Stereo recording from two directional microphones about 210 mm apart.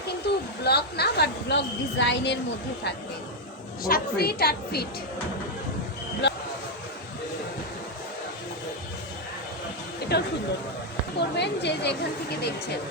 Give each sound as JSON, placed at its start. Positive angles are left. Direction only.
{"t": 0.2, "sound": "a sound", "side_deg": 50}
{"t": 0.6, "sound": "a woman's voice", "side_deg": 50}
{"t": 3.8, "sound": "a woman's voice", "side_deg": 45}
{"t": 6.2, "sound": "speech", "side_deg": 55}
{"t": 10.1, "sound": "a woman's voice", "side_deg": 50}